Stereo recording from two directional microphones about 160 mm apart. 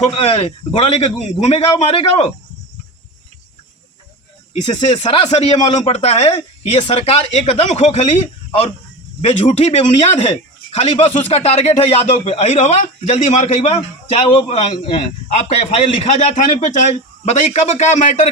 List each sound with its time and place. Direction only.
0.2 s speech: 40° left (ahead or behind)
4.5 s a man's voice: 45° left (ahead or behind)
9.2 s a man's voice: 45° left (ahead or behind)